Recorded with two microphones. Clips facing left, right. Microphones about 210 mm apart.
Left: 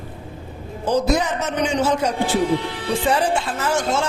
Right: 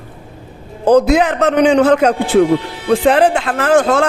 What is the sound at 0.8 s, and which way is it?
A man's voice, 60° right (ahead or behind).